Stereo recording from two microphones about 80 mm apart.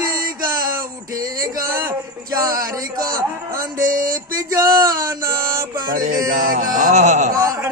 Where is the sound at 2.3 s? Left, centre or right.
Right.